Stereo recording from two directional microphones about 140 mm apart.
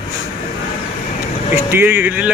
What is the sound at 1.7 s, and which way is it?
Speech, 15° right (ahead or behind).